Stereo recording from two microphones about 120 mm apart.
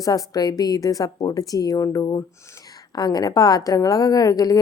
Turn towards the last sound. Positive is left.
turn(degrees=30)  # may be behind; listen again after turning